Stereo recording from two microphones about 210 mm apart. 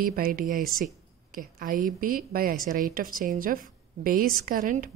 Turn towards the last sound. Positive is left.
turn(degrees=-40)  # may be behind; listen again after turning